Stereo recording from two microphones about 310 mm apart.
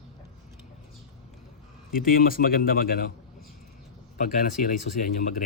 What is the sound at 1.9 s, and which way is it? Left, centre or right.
A man's voice, left.